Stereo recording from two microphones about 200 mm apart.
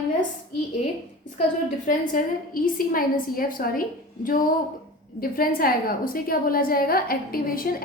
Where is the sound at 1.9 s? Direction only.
45° left (ahead or behind).